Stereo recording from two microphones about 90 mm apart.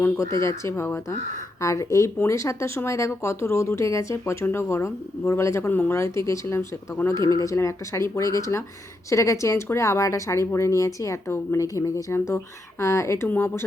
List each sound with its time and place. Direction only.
0.4 s speech: 30° left (ahead or behind)
12.1 s speech: 30° left (ahead or behind)
13.2 s speech: 20° left (ahead or behind)